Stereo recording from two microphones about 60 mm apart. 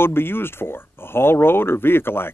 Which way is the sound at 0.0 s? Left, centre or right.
Left.